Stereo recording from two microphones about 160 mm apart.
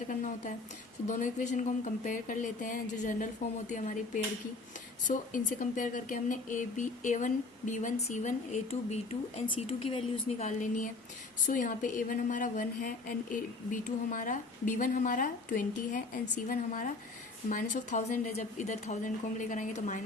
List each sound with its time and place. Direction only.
0.1 s a woman's voice: 55° left (ahead or behind)
11.4 s a woman's voice: 55° left (ahead or behind)